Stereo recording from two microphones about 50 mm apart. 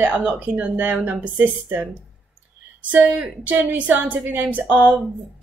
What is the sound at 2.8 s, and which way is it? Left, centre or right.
A woman's voice, right.